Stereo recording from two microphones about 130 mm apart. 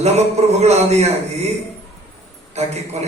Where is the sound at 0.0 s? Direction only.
55° right (ahead or behind).